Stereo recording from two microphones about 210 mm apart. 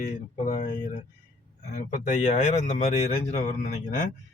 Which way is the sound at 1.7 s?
35° left (ahead or behind).